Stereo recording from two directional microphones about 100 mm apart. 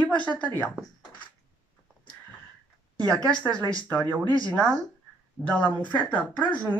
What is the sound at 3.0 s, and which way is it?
Speech, 40° right (ahead or behind).